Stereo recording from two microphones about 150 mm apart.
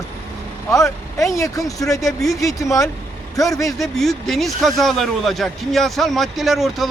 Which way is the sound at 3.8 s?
Centre (ahead or behind).